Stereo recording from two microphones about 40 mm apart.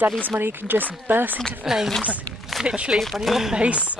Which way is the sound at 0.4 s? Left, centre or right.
Right.